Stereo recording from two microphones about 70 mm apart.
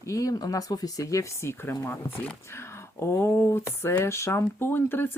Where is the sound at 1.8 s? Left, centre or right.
Left.